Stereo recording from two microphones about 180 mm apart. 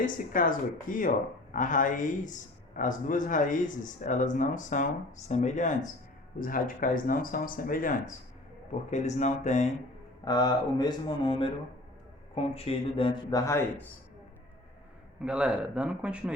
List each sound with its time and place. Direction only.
0.0 s a man's voice: 50° left (ahead or behind)
10.2 s speech: 20° left (ahead or behind)
12.5 s speech: 30° left (ahead or behind)
15.2 s a man's voice: 5° right (ahead or behind)